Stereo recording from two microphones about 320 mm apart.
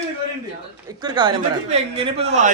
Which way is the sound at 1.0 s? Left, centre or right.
Centre.